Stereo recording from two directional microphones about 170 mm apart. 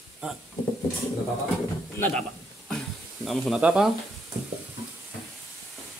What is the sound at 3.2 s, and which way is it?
Speech, centre (ahead or behind).